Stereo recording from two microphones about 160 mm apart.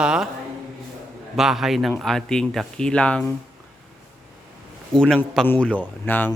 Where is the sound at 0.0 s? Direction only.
5° right (ahead or behind).